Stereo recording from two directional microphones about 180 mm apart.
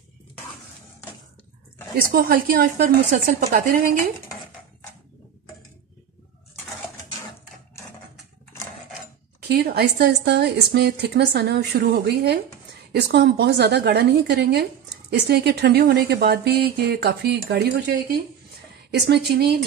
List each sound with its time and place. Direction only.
2.1 s a woman's voice: 55° right (ahead or behind)
9.5 s speech: 60° right (ahead or behind)
18.9 s speech: 65° right (ahead or behind)